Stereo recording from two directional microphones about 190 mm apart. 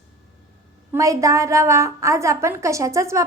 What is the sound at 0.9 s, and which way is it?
A woman's voice, 15° right (ahead or behind).